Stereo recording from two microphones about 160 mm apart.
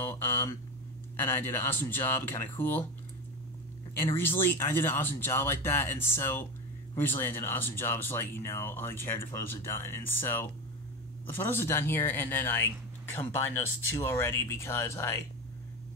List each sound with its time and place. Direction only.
0.1 s a sound: 15° left (ahead or behind)
1.2 s speech: 15° left (ahead or behind)
4.2 s speech: 15° left (ahead or behind)